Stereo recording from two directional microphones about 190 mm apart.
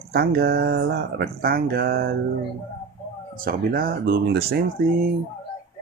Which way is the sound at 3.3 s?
50° right (ahead or behind).